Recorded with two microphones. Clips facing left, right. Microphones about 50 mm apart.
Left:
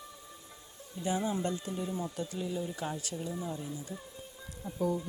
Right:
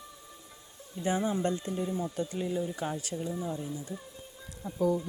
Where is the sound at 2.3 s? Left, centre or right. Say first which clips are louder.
Right 4 dB; right.